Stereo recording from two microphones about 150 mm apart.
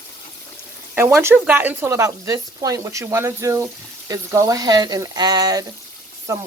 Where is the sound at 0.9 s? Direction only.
15° right (ahead or behind).